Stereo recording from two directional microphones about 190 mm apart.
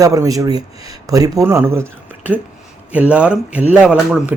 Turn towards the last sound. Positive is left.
turn(degrees=-5)  # may be behind; listen again after turning